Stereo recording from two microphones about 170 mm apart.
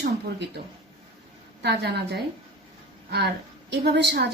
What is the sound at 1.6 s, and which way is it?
Speech, 75° right (ahead or behind).